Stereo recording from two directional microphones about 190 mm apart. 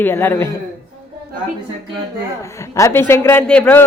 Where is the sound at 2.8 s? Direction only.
15° left (ahead or behind).